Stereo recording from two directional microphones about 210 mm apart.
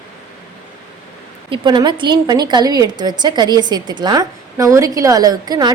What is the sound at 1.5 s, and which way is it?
A woman's voice, 20° right (ahead or behind).